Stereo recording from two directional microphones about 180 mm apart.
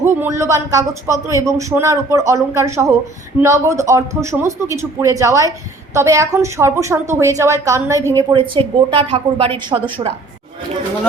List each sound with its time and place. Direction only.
0.0 s a man's voice: 15° right (ahead or behind)